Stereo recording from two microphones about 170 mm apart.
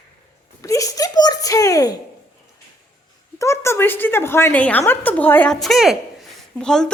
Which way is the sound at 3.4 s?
15° left (ahead or behind).